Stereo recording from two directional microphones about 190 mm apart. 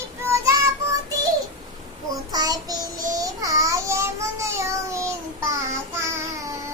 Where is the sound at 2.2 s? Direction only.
20° right (ahead or behind).